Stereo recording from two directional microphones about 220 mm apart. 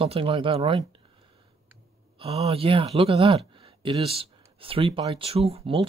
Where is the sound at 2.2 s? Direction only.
25° right (ahead or behind).